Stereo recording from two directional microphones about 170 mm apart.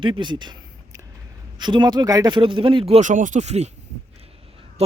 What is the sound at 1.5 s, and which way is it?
Speech, 25° right (ahead or behind).